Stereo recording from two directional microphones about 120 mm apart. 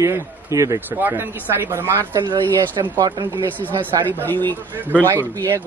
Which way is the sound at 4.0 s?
15° left (ahead or behind).